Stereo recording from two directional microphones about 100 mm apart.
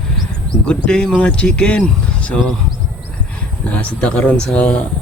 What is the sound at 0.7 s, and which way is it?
Speech, 10° left (ahead or behind).